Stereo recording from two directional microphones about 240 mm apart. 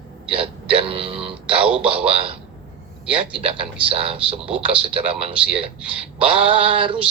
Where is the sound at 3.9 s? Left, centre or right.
Right.